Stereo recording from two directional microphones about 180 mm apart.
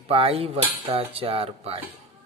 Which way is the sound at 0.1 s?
30° right (ahead or behind).